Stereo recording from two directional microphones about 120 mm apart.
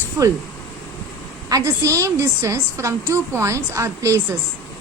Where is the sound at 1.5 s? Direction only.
25° right (ahead or behind).